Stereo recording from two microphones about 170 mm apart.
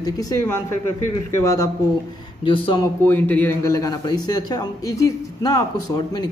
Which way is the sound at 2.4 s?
30° left (ahead or behind).